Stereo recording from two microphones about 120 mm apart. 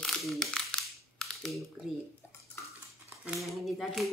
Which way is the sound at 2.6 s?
20° left (ahead or behind).